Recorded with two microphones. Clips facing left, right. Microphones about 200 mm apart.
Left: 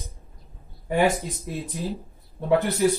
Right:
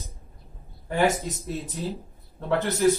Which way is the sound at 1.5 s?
15° left (ahead or behind).